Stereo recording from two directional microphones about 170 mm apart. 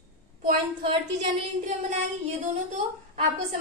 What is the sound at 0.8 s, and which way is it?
Speech, 30° right (ahead or behind).